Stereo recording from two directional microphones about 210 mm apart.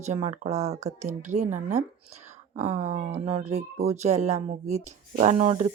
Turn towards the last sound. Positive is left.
turn(degrees=-30)  # may be behind; listen again after turning